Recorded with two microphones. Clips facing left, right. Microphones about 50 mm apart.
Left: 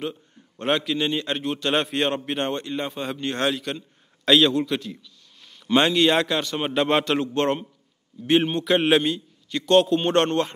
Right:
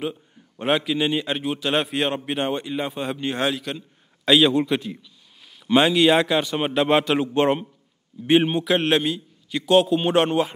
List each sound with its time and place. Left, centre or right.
0.0 s a man's voice: centre
4.6 s speech: centre
5.7 s speech: centre
8.7 s a man's voice: centre